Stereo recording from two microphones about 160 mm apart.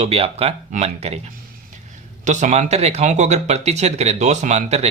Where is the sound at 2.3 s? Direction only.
50° right (ahead or behind).